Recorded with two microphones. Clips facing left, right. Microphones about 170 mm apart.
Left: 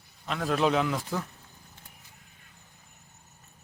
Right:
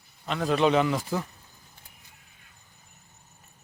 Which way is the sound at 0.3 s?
Centre (ahead or behind).